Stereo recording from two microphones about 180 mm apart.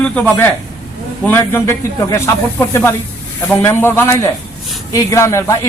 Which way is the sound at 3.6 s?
10° left (ahead or behind).